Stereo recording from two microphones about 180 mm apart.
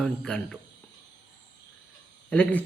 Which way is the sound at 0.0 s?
5° left (ahead or behind).